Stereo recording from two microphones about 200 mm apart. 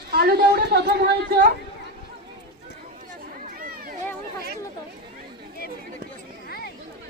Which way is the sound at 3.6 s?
45° right (ahead or behind).